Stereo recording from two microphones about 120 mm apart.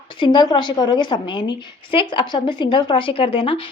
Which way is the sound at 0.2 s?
40° left (ahead or behind).